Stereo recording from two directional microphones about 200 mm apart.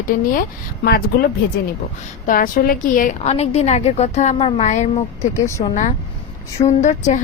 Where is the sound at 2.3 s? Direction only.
45° left (ahead or behind).